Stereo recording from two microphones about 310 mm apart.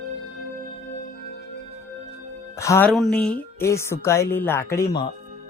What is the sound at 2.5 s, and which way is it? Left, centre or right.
Speech, centre.